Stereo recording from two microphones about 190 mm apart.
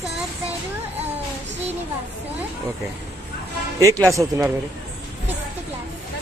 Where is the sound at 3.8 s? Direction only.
15° right (ahead or behind).